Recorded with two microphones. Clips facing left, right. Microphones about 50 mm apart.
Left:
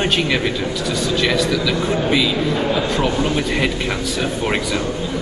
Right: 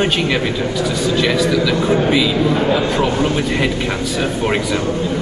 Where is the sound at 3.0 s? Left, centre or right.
Centre.